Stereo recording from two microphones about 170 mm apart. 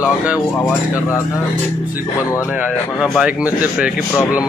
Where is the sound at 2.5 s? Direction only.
5° right (ahead or behind).